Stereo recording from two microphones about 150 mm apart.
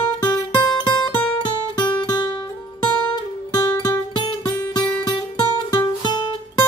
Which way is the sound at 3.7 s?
30° left (ahead or behind).